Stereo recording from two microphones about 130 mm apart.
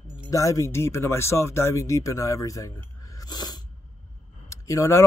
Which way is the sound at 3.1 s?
30° left (ahead or behind).